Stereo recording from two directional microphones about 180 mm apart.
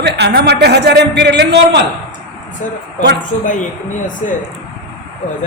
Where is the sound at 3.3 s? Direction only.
45° left (ahead or behind).